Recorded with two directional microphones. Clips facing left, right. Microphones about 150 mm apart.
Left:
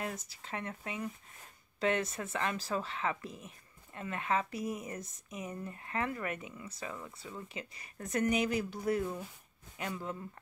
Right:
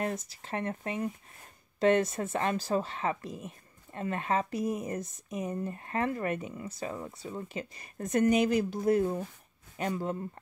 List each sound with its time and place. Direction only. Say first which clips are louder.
0.0 s speech: right 6 dB; 45° right (ahead or behind); by 7.4 s 25° right (ahead or behind)
7.5 s speech: right 6 dB; 40° right (ahead or behind)